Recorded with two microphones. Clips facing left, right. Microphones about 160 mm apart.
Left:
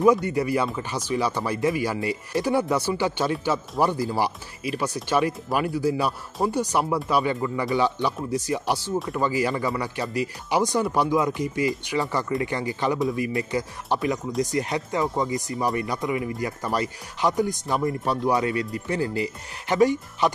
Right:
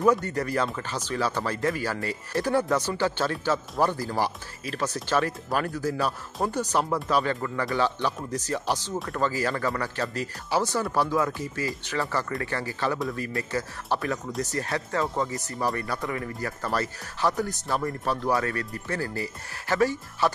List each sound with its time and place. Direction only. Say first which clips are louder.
0.0 s speech: left 4 dB; 10° left (ahead or behind)